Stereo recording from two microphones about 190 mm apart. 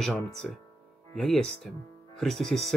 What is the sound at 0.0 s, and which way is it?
Speech, centre (ahead or behind).